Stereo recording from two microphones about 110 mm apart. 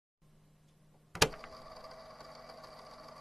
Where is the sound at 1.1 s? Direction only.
Centre (ahead or behind).